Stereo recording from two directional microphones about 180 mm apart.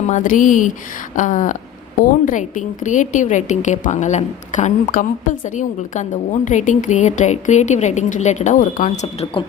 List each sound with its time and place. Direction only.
0.1 s a woman's voice: 45° left (ahead or behind)